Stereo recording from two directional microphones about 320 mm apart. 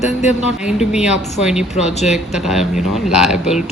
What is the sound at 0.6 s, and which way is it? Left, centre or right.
Speech, centre.